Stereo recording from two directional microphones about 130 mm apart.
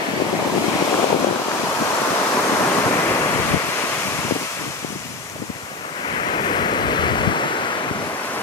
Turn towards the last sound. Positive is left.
turn(degrees=40)  # may be behind; listen again after turning